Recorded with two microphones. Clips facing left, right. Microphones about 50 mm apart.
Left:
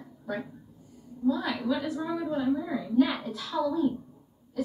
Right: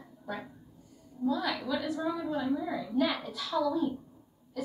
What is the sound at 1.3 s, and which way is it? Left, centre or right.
A woman's voice, left.